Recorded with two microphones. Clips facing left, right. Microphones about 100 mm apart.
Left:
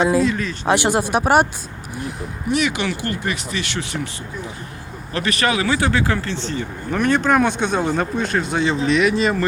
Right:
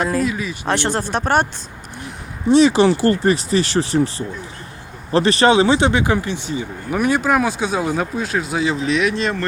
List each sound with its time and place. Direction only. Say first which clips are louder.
0.0 s speech: left 3 dB; centre (ahead or behind)
0.7 s speech: left 3 dB; 10° left (ahead or behind)
2.5 s speech: right 9 dB; 30° right (ahead or behind)
5.1 s speech: right 7 dB; 30° right (ahead or behind); by 9.5 s 5° left (ahead or behind)